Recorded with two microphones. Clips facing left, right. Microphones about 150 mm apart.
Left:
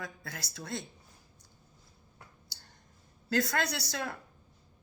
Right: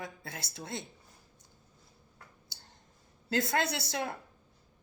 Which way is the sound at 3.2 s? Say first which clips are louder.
Even; 25° right (ahead or behind).